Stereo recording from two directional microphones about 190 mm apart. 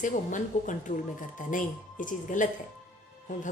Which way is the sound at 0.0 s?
40° left (ahead or behind).